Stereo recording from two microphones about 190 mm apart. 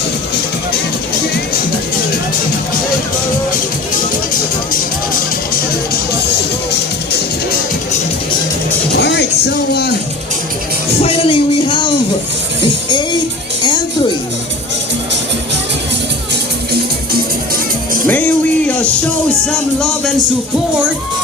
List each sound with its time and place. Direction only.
9.0 s a sound: 65° left (ahead or behind)
11.0 s music: 30° left (ahead or behind)
18.0 s music: 10° left (ahead or behind)
19.5 s speech: 5° left (ahead or behind)